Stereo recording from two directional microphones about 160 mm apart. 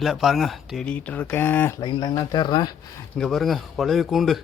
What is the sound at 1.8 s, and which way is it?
Speech, 25° left (ahead or behind).